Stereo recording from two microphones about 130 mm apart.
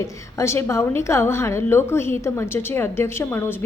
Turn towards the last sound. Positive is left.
turn(degrees=20)  # may be behind; listen again after turning